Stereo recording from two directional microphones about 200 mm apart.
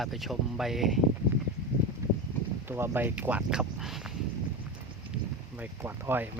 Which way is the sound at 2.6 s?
10° right (ahead or behind).